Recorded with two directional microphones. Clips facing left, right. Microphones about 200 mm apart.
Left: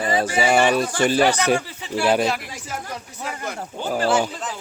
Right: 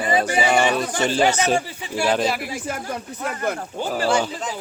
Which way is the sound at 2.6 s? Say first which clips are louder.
Right 4 dB; 55° right (ahead or behind).